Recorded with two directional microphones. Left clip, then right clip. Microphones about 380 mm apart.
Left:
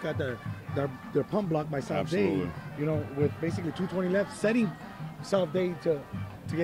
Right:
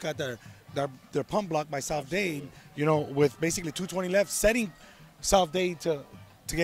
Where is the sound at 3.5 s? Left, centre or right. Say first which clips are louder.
Even; right.